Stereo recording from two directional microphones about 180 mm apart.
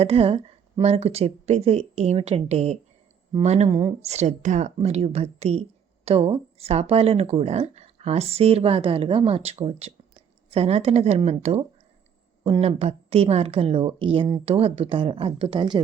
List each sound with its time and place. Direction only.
0.0 s speech: 35° right (ahead or behind)
3.8 s speech: 25° right (ahead or behind)
4.1 s speech: 40° right (ahead or behind)